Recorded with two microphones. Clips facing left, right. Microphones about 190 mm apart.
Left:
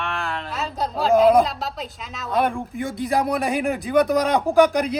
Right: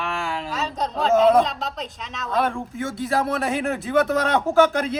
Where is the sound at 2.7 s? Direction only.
Centre (ahead or behind).